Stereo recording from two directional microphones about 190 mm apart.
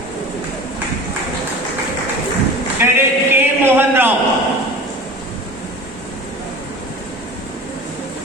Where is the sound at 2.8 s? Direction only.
10° right (ahead or behind).